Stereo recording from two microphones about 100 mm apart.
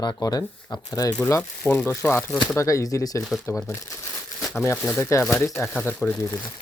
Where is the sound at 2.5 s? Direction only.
30° left (ahead or behind).